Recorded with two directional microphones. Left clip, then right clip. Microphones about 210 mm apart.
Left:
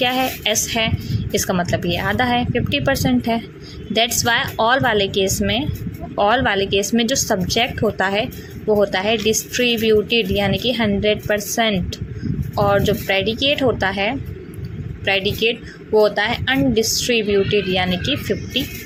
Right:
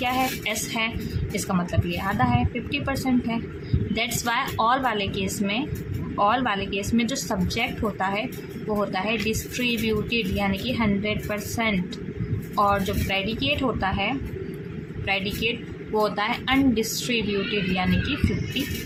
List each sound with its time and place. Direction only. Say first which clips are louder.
0.0 s speech: left 6 dB; 30° left (ahead or behind)